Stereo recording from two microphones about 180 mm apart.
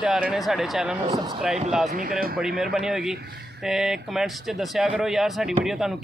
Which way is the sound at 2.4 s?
Centre (ahead or behind).